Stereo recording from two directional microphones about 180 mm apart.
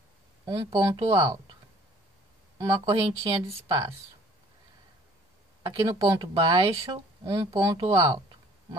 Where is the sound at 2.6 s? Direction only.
25° right (ahead or behind).